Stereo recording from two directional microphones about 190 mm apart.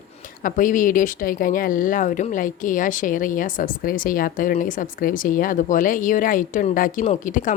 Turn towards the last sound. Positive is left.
turn(degrees=40)  # may be behind; listen again after turning